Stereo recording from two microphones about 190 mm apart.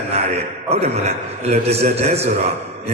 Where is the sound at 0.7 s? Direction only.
35° right (ahead or behind).